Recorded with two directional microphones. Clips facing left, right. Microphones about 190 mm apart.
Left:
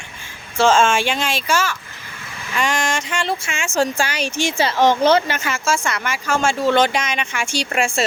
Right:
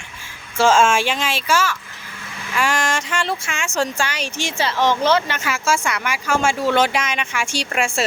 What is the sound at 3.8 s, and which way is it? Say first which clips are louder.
Speech: left 3 dB; 40° left (ahead or behind).